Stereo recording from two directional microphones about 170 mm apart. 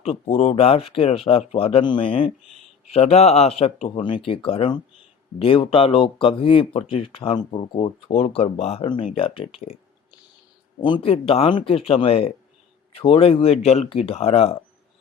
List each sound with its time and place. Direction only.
0.0 s speech: 35° left (ahead or behind)
10.8 s speech: 25° left (ahead or behind)